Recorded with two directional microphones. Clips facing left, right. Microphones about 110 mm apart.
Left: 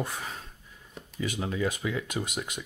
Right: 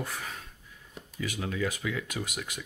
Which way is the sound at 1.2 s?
25° left (ahead or behind).